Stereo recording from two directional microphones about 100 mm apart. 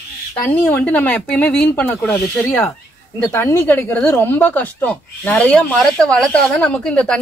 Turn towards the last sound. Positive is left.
turn(degrees=10)  # may be behind; listen again after turning